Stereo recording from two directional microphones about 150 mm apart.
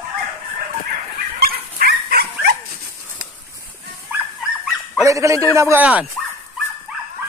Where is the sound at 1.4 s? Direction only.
85° right.